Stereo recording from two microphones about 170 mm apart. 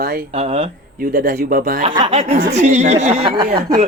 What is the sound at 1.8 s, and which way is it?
Speech, 30° right (ahead or behind).